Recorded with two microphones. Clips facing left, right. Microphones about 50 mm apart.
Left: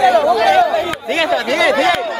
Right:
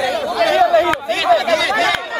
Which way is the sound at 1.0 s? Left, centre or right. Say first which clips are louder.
Right 1 dB; left.